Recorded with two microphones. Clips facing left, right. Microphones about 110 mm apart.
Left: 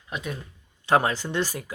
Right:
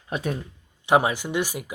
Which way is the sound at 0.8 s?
15° right (ahead or behind).